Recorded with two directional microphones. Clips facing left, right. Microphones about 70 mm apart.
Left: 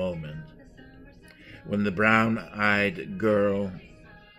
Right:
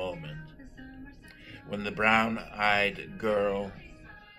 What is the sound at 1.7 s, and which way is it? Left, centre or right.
Speech, left.